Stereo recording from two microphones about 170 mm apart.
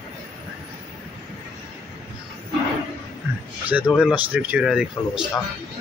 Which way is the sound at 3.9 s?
5° right (ahead or behind).